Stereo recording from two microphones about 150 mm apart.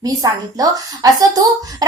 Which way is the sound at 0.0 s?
25° right (ahead or behind).